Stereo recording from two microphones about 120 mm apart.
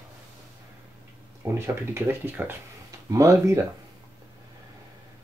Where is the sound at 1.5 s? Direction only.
20° right (ahead or behind).